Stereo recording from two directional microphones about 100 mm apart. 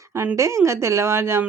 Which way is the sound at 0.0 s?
25° right (ahead or behind).